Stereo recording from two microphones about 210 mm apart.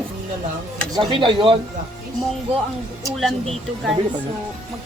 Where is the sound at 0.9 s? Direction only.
25° right (ahead or behind).